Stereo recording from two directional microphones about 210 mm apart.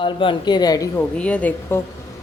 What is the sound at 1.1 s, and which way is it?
Speech, 5° left (ahead or behind).